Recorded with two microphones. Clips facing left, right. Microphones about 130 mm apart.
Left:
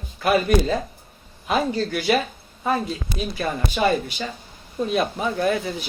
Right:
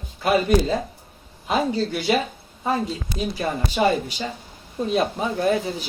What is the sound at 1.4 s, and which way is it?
Speech, 20° right (ahead or behind).